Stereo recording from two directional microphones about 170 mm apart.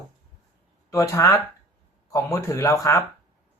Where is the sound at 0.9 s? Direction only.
20° left (ahead or behind).